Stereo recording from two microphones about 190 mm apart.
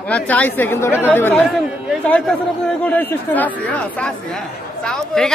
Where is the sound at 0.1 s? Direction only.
10° left (ahead or behind).